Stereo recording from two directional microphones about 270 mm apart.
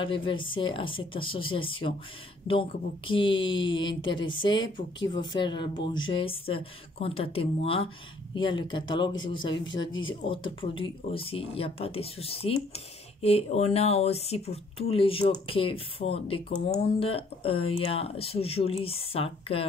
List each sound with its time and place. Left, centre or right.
0.0 s speech: centre